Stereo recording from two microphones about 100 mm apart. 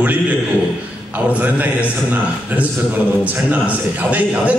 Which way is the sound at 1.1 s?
15° right (ahead or behind).